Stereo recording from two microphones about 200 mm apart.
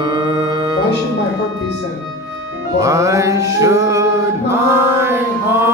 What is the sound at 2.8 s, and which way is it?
Mantra, 15° right (ahead or behind).